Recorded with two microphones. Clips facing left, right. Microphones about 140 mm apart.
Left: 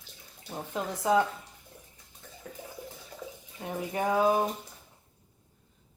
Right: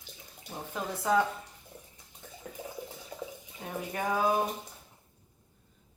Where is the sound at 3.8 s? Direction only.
20° left (ahead or behind).